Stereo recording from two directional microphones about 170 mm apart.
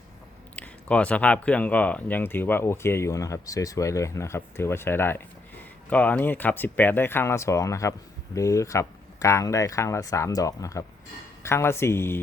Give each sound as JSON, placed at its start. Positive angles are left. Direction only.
{"t": 0.5, "sound": "speech", "side_deg": 5}